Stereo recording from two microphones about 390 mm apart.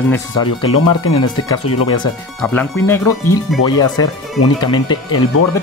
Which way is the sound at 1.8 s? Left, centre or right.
Centre.